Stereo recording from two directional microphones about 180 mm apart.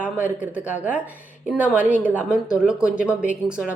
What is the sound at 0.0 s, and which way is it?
Speech, 10° right (ahead or behind).